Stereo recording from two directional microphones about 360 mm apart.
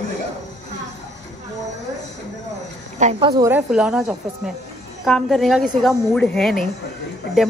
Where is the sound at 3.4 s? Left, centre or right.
Centre.